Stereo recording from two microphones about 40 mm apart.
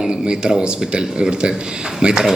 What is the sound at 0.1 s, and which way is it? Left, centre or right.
Speech, right.